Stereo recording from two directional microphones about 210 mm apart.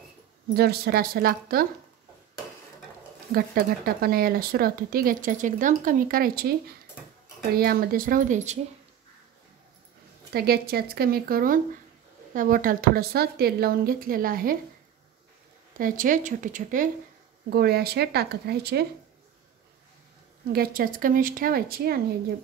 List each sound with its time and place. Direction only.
0.6 s speech: 45° right (ahead or behind)
3.3 s speech: 45° right (ahead or behind)
7.5 s speech: 45° right (ahead or behind)
10.3 s speech: 50° right (ahead or behind)
15.8 s speech: 40° right (ahead or behind)
20.5 s speech: 45° right (ahead or behind)